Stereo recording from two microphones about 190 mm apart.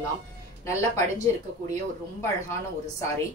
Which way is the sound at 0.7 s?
15° left (ahead or behind).